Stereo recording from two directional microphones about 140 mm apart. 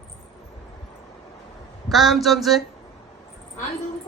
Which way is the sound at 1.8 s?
Centre (ahead or behind).